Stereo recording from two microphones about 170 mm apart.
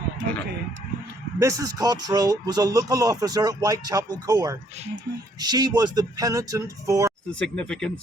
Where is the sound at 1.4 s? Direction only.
20° right (ahead or behind).